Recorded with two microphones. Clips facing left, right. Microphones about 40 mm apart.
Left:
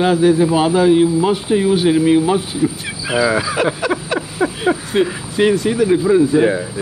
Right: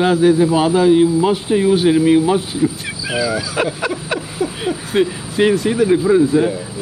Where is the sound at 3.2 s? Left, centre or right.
Left.